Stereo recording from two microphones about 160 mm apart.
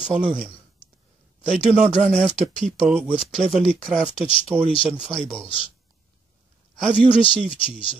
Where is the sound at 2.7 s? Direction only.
5° left (ahead or behind).